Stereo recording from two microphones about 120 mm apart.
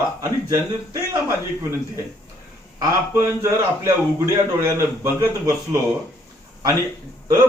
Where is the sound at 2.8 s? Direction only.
25° right (ahead or behind).